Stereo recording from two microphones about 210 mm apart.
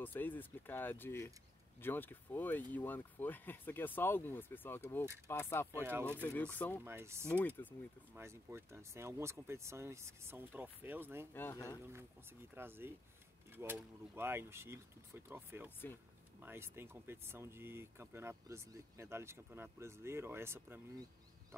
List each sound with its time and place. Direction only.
0.0 s speech: 10° left (ahead or behind)
5.7 s speech: 10° right (ahead or behind)
6.2 s speech: 10° left (ahead or behind)
6.8 s speech: 10° right (ahead or behind)
7.2 s speech: 10° left (ahead or behind)
8.1 s speech: 10° right (ahead or behind)
11.3 s speech: 15° left (ahead or behind)
12.5 s speech: 10° right (ahead or behind)